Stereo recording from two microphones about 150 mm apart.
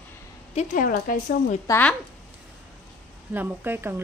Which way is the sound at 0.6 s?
60° left (ahead or behind).